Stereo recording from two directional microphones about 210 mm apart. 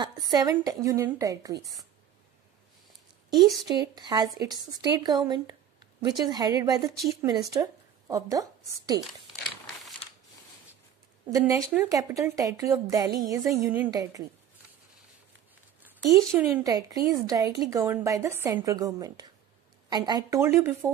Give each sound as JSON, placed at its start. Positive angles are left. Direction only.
{"t": 0.0, "sound": "a woman's voice", "side_deg": -20}
{"t": 3.8, "sound": "speech", "side_deg": -20}
{"t": 11.2, "sound": "a woman's voice", "side_deg": -15}
{"t": 15.8, "sound": "a sound", "side_deg": -15}
{"t": 16.4, "sound": "a woman's voice", "side_deg": -15}